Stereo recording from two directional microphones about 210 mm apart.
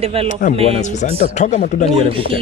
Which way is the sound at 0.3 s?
40° left (ahead or behind).